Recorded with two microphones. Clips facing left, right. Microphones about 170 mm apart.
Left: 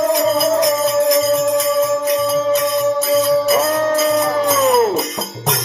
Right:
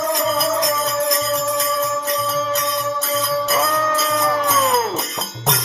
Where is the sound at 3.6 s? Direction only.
30° left (ahead or behind).